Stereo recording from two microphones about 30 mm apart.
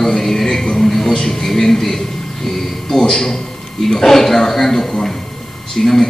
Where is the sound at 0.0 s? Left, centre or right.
Centre.